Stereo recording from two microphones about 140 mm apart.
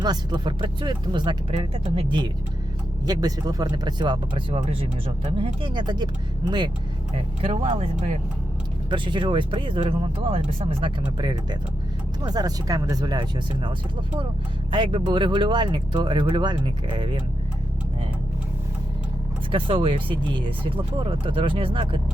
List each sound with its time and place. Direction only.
0.0 s speech: 30° right (ahead or behind)
3.1 s speech: 25° right (ahead or behind)
7.5 s speech: 50° right (ahead or behind)
8.9 s speech: 35° right (ahead or behind)
19.5 s speech: 40° right (ahead or behind)